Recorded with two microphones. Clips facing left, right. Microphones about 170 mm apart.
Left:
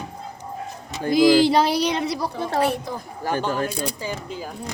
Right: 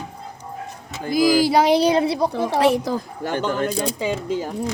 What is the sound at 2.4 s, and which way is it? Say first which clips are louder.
Speech: right 4 dB; 90° right.